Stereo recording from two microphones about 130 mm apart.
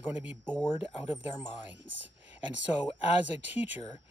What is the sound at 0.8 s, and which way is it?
Speech, 50° left (ahead or behind).